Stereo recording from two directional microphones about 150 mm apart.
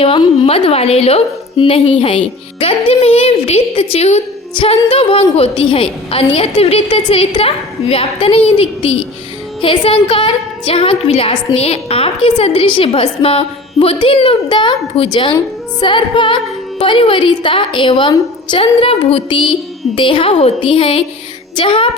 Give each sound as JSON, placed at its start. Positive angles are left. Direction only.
{"t": 0.0, "sound": "a woman's voice", "side_deg": 40}